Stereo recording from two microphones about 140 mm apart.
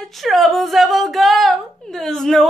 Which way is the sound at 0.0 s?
Centre (ahead or behind).